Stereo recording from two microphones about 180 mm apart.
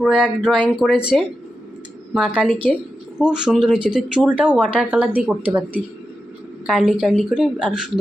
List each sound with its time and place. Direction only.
0.0 s speech: centre (ahead or behind)
2.1 s speech: 5° right (ahead or behind)
4.6 s speech: 5° left (ahead or behind)
4.9 s speech: 5° right (ahead or behind)